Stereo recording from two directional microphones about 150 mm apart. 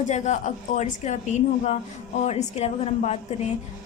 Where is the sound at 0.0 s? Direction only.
55° left (ahead or behind).